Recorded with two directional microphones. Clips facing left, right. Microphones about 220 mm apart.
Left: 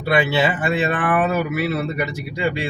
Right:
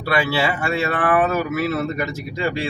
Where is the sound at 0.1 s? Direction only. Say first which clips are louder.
Left 2 dB; 20° left (ahead or behind).